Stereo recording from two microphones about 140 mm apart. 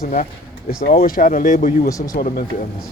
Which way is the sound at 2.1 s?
85° left.